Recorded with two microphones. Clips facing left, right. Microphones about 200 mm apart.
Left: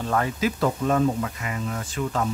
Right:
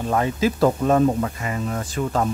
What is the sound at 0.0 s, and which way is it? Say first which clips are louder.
Speech: right 3 dB; 20° right (ahead or behind).